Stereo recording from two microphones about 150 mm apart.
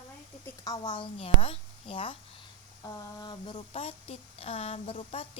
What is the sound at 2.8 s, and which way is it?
Speech, 25° left (ahead or behind).